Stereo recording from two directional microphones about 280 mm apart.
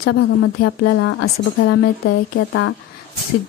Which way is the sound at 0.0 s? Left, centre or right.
Left.